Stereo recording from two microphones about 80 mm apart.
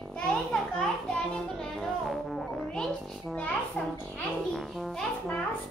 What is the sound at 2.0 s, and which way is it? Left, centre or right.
Speech, centre.